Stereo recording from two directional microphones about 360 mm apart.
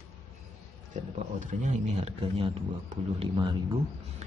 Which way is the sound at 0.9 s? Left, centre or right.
Right.